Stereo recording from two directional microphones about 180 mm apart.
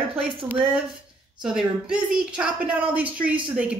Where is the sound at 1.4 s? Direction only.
5° right (ahead or behind).